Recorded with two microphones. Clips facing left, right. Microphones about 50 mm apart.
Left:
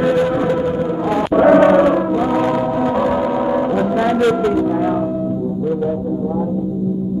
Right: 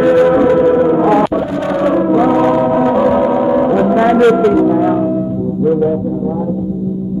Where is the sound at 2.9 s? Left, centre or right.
Centre.